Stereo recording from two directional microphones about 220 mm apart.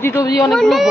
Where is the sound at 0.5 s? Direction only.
Centre (ahead or behind).